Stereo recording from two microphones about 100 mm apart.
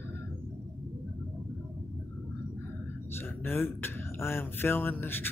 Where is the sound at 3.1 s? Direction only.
25° left (ahead or behind).